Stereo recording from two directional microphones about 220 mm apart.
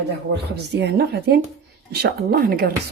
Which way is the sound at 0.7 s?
50° right (ahead or behind).